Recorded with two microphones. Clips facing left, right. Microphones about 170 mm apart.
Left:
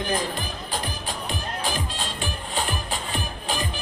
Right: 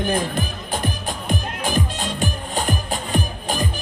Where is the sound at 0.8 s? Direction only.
50° right (ahead or behind).